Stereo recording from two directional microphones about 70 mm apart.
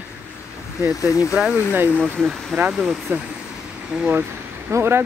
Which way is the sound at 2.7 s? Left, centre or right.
Centre.